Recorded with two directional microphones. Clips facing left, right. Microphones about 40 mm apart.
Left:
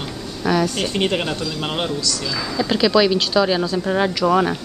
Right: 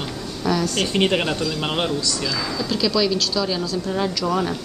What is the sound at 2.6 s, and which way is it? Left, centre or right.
Speech, left.